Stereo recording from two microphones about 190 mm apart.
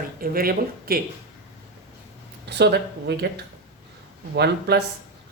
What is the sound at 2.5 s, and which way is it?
Speech, 65° right (ahead or behind).